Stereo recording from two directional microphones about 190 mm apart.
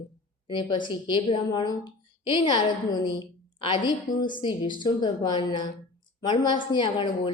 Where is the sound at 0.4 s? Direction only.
25° left (ahead or behind).